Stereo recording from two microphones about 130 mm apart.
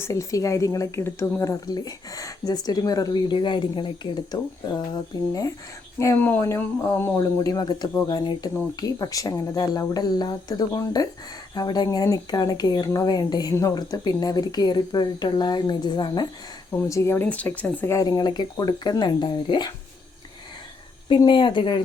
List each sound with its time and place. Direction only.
0.0 s speech: 25° left (ahead or behind)
6.0 s speech: 20° left (ahead or behind)
7.2 s speech: 30° left (ahead or behind)
16.7 s speech: 20° left (ahead or behind); by 19.7 s 35° left (ahead or behind)
21.2 s speech: 35° left (ahead or behind)